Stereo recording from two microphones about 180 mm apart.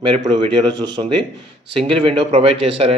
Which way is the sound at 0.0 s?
25° right (ahead or behind).